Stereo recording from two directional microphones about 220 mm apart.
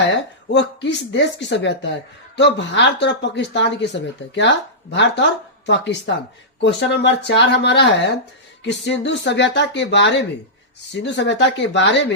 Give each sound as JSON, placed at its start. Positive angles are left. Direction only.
{"t": 0.1, "sound": "speech", "side_deg": 55}